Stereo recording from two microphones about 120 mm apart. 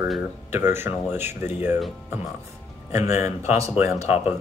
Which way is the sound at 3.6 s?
25° right (ahead or behind).